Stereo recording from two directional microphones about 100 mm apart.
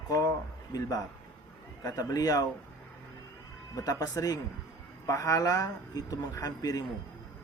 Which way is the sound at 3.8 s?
35° left (ahead or behind).